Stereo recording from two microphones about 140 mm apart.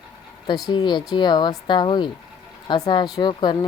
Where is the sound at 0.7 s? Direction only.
30° left (ahead or behind).